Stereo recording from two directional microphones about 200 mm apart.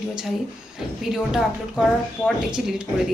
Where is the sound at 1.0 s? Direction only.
Centre (ahead or behind).